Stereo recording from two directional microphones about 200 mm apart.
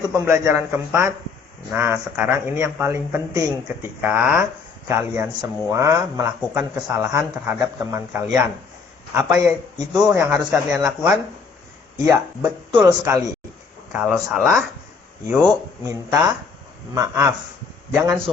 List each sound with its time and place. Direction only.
0.1 s speech: 15° right (ahead or behind)
12.0 s speech: 15° right (ahead or behind)
14.0 s speech: centre (ahead or behind)
15.3 s speech: 15° right (ahead or behind)